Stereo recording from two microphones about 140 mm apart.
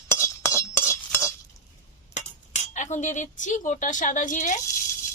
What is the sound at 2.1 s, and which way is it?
Cutlery, 60° left (ahead or behind).